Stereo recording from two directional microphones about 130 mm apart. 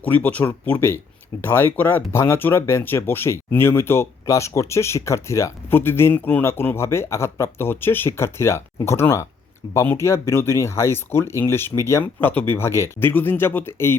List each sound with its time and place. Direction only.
0.0 s speech: 15° left (ahead or behind)